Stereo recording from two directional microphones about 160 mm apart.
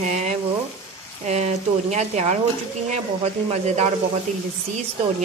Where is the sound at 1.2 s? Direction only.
45° right (ahead or behind).